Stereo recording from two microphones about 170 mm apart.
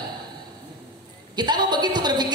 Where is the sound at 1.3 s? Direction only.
25° right (ahead or behind).